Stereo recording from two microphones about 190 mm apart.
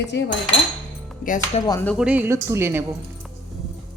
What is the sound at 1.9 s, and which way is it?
Speech, 5° right (ahead or behind).